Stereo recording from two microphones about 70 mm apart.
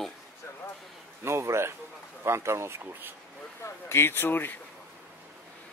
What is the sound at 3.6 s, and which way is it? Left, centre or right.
Speech, left.